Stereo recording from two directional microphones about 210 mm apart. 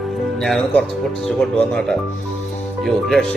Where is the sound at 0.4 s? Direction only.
Centre (ahead or behind).